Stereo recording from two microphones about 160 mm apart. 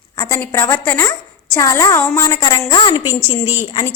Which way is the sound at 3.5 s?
35° left (ahead or behind).